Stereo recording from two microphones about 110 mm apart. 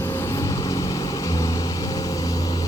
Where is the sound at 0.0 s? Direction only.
20° left (ahead or behind).